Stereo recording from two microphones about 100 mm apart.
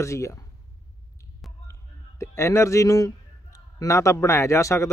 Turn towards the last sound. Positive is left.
turn(degrees=30)  # may be behind; listen again after turning